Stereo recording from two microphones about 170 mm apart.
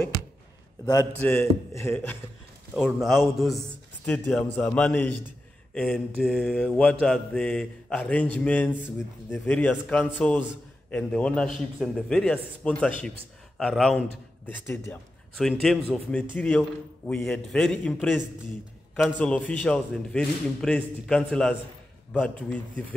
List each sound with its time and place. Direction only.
1.2 s mantra: 15° left (ahead or behind)
2.7 s mantra: centre (ahead or behind)
10.9 s a man's voice: 5° left (ahead or behind)
19.1 s a man's voice: 10° left (ahead or behind)
22.1 s mantra: 5° left (ahead or behind)